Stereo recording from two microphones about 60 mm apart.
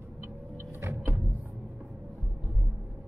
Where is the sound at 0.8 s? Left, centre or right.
Right.